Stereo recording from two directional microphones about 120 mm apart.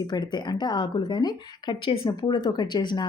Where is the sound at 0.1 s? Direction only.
40° left (ahead or behind).